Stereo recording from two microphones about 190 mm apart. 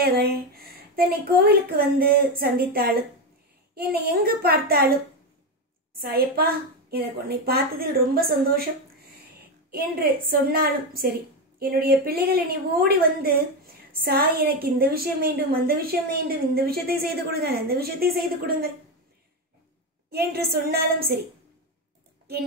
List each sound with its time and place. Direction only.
0.0 s a woman's voice: 55° right (ahead or behind)
5.9 s a woman's voice: 55° right (ahead or behind)
9.7 s a woman's voice: 55° right (ahead or behind)
20.1 s a woman's voice: 55° right (ahead or behind)